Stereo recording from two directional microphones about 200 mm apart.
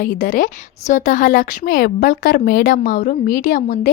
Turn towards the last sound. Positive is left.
turn(degrees=40)  # may be behind; listen again after turning